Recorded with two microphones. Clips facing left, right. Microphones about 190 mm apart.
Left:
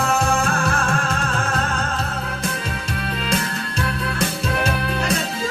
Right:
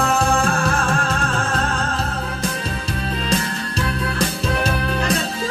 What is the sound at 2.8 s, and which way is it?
Music, 35° right (ahead or behind).